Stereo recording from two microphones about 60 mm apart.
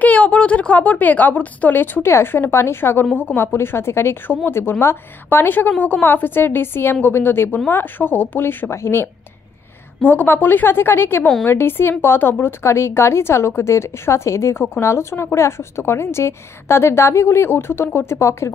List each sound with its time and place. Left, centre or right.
0.0 s a woman's voice: left
2.0 s a woman's voice: left
18.4 s speech: left